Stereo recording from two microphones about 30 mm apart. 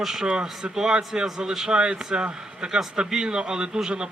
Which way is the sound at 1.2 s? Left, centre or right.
Centre.